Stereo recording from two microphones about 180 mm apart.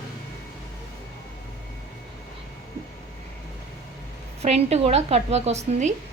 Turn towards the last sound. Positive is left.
turn(degrees=-40)  # may be behind; listen again after turning